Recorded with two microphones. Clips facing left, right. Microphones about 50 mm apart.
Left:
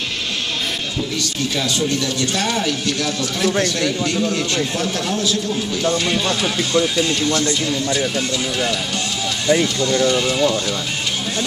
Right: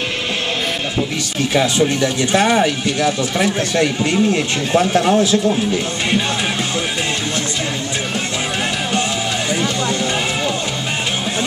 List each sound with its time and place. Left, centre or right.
1.5 s speech: right
9.6 s speech: right